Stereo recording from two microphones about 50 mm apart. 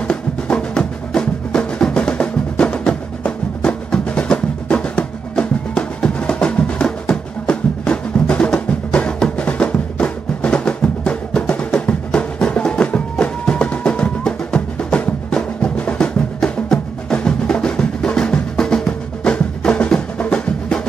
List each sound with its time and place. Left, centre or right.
0.1 s drum: centre
9.4 s music: left
16.6 s percussion: centre